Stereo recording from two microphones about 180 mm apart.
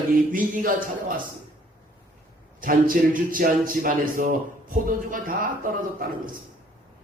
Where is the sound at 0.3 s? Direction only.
50° right (ahead or behind).